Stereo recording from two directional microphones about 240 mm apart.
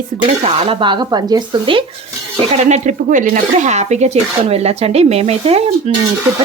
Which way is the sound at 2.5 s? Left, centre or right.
Right.